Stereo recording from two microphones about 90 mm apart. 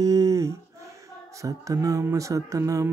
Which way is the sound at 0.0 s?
40° right (ahead or behind).